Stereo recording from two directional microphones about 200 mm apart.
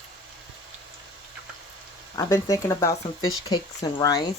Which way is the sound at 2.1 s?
15° left (ahead or behind).